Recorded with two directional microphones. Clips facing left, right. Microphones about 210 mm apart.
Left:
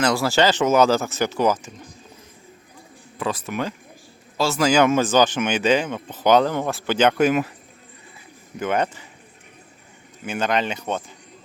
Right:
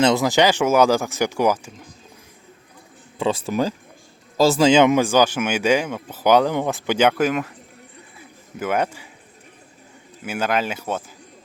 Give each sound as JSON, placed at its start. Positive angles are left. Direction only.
{"t": 0.0, "sound": "speech", "side_deg": -20}
{"t": 3.2, "sound": "speech", "side_deg": -25}
{"t": 8.5, "sound": "speech", "side_deg": -5}
{"t": 10.2, "sound": "speech", "side_deg": -5}